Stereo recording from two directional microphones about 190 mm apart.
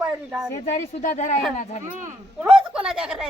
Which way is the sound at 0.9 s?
40° left (ahead or behind).